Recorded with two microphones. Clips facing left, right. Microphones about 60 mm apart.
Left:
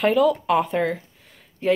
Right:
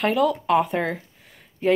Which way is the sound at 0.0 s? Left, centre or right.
Centre.